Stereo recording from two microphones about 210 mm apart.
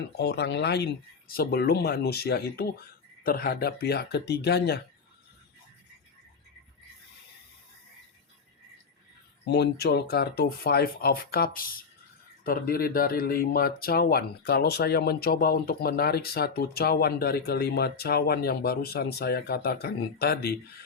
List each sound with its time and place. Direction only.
0.2 s speech: 55° left (ahead or behind)
9.4 s speech: 50° left (ahead or behind)